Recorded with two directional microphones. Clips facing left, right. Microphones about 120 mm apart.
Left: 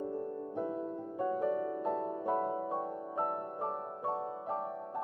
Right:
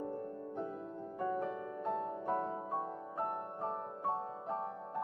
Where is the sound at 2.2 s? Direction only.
10° left (ahead or behind).